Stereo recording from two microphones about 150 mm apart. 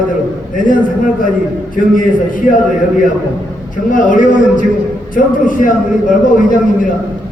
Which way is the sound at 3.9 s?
60° left (ahead or behind).